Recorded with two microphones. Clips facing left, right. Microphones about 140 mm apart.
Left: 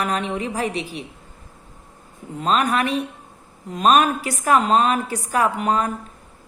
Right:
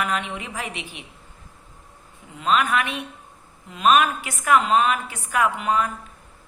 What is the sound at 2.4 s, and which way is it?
A man's voice, 35° left (ahead or behind).